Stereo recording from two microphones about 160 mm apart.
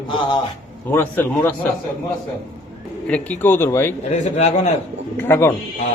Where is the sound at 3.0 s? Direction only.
10° left (ahead or behind).